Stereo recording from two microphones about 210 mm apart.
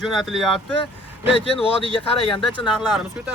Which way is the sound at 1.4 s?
25° left (ahead or behind).